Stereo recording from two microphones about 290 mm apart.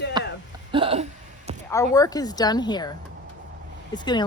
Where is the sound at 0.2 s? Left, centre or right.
Centre.